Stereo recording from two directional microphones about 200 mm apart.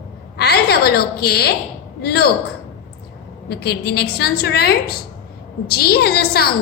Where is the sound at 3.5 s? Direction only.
55° left (ahead or behind).